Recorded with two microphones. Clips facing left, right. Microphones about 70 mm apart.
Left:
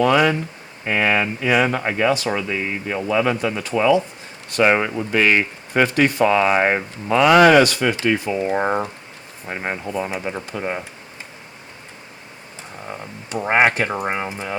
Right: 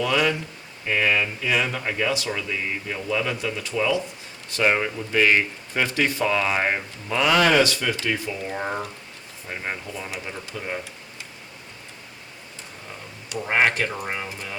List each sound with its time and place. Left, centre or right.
0.0 s speech: left
0.9 s speech: left
4.5 s speech: left
9.5 s speech: left
10.2 s speech: left
13.3 s speech: left
13.6 s speech: left